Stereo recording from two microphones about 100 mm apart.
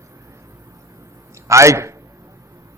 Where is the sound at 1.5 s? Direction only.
30° right (ahead or behind).